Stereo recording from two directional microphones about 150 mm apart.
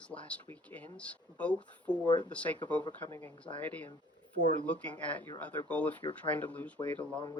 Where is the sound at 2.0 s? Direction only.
30° left (ahead or behind).